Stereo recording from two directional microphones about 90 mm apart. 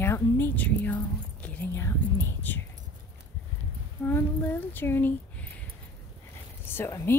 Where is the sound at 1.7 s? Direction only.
25° left (ahead or behind).